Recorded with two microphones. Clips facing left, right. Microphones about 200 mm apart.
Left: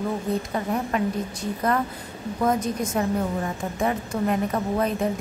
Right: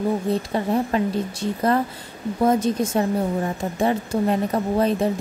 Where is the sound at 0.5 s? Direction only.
30° right (ahead or behind).